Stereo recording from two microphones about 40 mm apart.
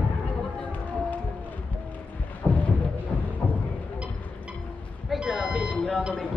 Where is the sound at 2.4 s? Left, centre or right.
Left.